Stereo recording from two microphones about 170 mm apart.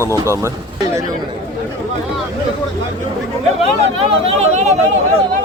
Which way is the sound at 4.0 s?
35° right (ahead or behind).